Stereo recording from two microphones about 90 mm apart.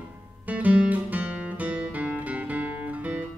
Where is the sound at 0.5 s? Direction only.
15° right (ahead or behind).